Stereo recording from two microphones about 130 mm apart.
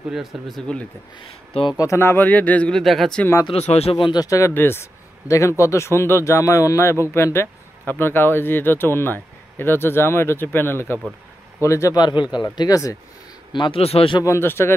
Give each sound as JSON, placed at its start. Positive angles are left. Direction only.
{"t": 0.1, "sound": "speech", "side_deg": 0}
{"t": 1.2, "sound": "speech", "side_deg": 40}
{"t": 1.8, "sound": "speech", "side_deg": 20}
{"t": 3.4, "sound": "speech", "side_deg": 55}
{"t": 13.5, "sound": "speech", "side_deg": 40}
{"t": 14.2, "sound": "speech", "side_deg": 20}